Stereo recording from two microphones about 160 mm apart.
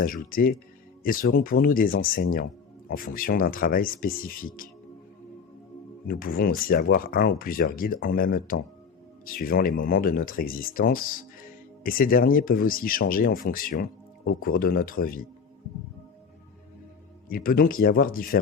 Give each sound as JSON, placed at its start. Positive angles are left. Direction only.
{"t": 0.0, "sound": "speech", "side_deg": 65}
{"t": 6.1, "sound": "speech", "side_deg": 65}
{"t": 17.2, "sound": "speech", "side_deg": 65}